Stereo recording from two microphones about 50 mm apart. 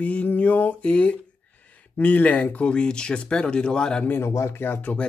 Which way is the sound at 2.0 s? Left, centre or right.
Left.